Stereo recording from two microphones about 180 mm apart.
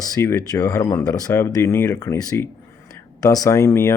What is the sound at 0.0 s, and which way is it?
Speech, 15° left (ahead or behind).